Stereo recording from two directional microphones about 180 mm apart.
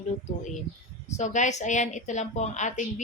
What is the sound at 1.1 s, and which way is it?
A woman's voice, 40° left (ahead or behind).